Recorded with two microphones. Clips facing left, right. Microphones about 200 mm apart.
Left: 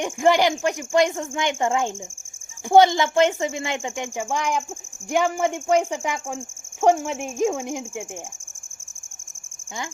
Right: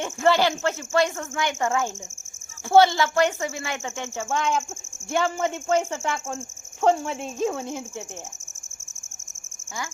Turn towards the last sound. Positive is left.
turn(degrees=15)  # may be behind; listen again after turning